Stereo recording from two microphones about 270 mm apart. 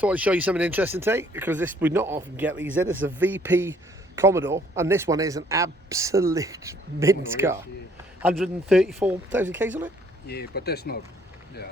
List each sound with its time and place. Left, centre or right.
0.0 s speech: centre
10.2 s speech: left